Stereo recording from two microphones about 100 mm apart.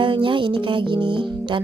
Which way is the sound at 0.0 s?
60° right (ahead or behind).